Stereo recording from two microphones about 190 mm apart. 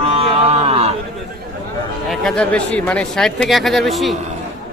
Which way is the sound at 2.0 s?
5° left (ahead or behind).